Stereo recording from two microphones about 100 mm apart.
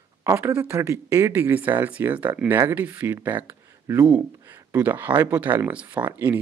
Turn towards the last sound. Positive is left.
turn(degrees=-15)  # may be behind; listen again after turning